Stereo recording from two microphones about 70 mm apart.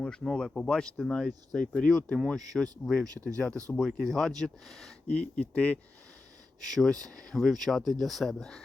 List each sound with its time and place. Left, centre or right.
0.0 s speech: centre
3.8 s speech: centre
5.0 s speech: centre
6.6 s speech: centre